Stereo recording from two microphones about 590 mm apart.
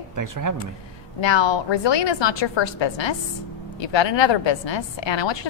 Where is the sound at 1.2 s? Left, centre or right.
Left.